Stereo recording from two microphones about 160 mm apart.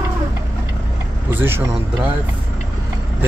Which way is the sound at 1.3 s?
15° right (ahead or behind).